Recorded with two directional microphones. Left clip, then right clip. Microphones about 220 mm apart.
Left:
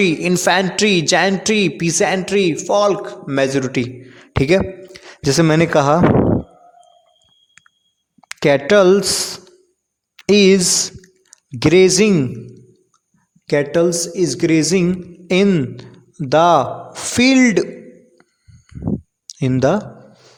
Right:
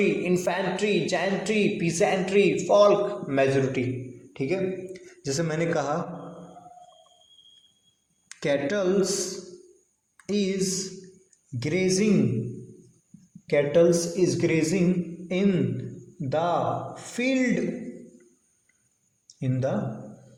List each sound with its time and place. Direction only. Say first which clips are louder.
0.0 s a man's voice: left 8 dB; 45° left (ahead or behind)
8.3 s speech: left 13 dB; 35° left (ahead or behind)
10.2 s a man's voice: left 16 dB; 40° left (ahead or behind)
13.5 s a man's voice: left 4 dB; 45° left (ahead or behind)
19.4 s a man's voice: left 13 dB; 45° left (ahead or behind)